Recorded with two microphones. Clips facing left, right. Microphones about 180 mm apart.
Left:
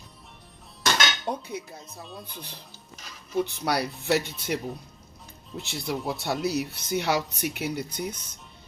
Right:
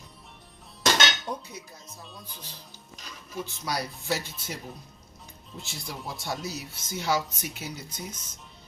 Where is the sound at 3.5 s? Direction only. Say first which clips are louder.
Left 5 dB; 65° left (ahead or behind).